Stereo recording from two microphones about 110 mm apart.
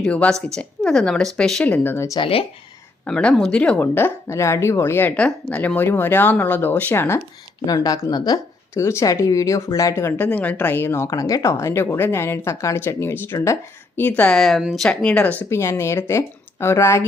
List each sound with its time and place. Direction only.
0.0 s speech: 10° left (ahead or behind)
1.7 s speech: 20° left (ahead or behind)
2.1 s speech: 50° left (ahead or behind)
3.1 s speech: 10° left (ahead or behind)
7.7 s speech: 35° left (ahead or behind)
14.2 s speech: 5° left (ahead or behind)
14.8 s speech: 10° left (ahead or behind)
15.4 s speech: 25° left (ahead or behind)